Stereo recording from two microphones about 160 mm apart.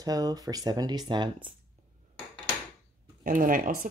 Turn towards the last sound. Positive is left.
turn(degrees=-60)  # may be behind; listen again after turning